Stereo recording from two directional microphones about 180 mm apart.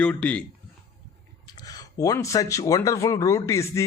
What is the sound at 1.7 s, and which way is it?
Speech, 20° left (ahead or behind).